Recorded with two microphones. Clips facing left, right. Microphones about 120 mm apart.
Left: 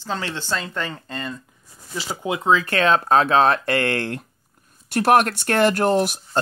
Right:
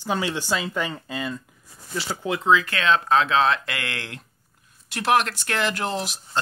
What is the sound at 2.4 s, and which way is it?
Speech, 40° left (ahead or behind).